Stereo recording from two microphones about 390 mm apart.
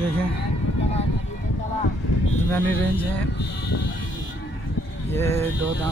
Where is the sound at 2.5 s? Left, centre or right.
Centre.